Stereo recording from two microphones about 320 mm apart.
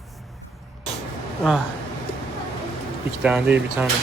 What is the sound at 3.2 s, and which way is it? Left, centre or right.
Speech, centre.